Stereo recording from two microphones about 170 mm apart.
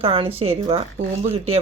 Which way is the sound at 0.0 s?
35° right (ahead or behind).